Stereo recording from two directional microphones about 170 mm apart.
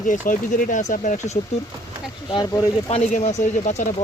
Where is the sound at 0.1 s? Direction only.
50° left (ahead or behind).